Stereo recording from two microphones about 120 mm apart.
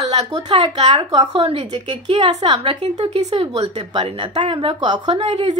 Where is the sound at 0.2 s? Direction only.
55° right (ahead or behind).